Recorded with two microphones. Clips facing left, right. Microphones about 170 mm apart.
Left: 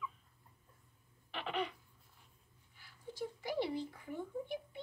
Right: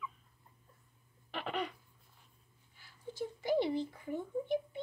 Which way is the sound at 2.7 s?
25° right (ahead or behind).